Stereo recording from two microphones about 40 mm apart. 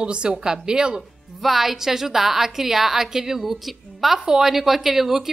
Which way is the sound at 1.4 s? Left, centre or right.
Centre.